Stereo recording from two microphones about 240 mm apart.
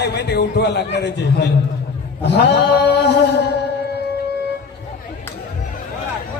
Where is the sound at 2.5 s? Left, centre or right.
Left.